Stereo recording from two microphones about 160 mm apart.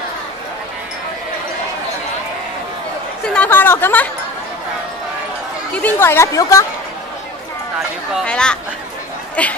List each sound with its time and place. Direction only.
3.3 s speech: 10° left (ahead or behind)
5.8 s a woman's voice: 10° left (ahead or behind)
8.3 s speech: 5° left (ahead or behind)